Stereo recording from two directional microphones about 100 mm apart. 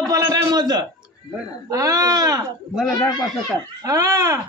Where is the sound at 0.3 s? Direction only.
45° right (ahead or behind).